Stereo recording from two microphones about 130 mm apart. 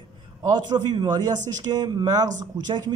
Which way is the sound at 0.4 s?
30° right (ahead or behind).